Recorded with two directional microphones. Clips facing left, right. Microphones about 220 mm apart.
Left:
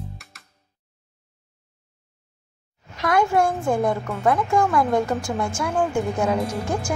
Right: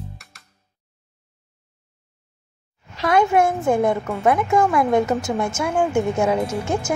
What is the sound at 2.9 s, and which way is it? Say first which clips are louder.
Speech: right 3 dB; 25° right (ahead or behind).